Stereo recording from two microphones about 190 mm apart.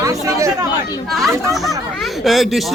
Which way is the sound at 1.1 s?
Centre (ahead or behind).